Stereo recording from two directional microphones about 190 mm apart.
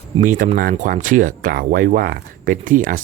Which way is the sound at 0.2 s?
40° right (ahead or behind).